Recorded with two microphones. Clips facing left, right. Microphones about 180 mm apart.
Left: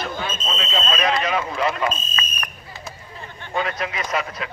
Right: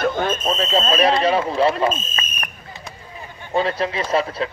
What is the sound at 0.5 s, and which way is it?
Speech, 35° right (ahead or behind).